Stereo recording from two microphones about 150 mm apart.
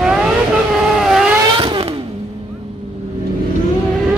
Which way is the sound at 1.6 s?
35° right (ahead or behind).